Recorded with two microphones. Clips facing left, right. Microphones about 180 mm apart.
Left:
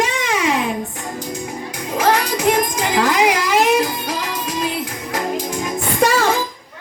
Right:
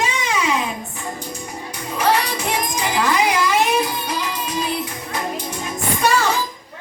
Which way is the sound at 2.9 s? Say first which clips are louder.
Left 3 dB; 85° left.